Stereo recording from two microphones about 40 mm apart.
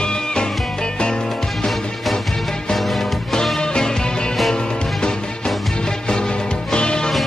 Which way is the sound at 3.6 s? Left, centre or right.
Left.